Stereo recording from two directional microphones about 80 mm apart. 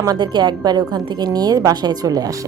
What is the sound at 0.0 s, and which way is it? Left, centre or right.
A woman's voice, right.